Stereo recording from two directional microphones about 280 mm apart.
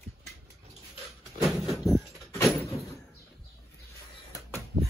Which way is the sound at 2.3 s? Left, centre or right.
Centre.